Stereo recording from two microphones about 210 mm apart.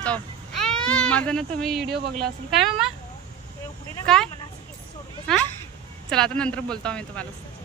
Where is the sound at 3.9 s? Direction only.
5° left (ahead or behind).